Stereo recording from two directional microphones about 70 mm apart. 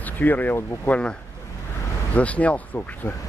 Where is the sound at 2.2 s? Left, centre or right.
Centre.